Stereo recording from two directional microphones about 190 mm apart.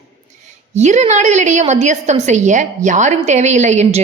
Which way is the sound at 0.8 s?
35° right (ahead or behind).